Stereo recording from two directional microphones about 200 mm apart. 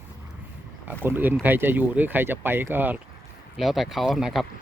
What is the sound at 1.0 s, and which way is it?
Speech, 10° right (ahead or behind).